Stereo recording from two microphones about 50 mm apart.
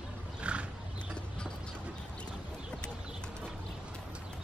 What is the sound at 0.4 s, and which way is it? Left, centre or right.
Roaring cats, right.